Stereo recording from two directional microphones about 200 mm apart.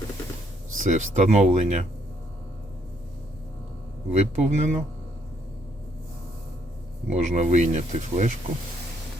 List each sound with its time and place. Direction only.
0.8 s speech: 40° right (ahead or behind)
4.1 s speech: 35° right (ahead or behind)
7.1 s speech: 35° right (ahead or behind)